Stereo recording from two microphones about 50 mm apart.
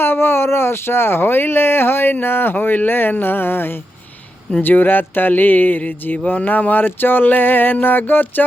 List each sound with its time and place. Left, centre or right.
0.0 s speech: left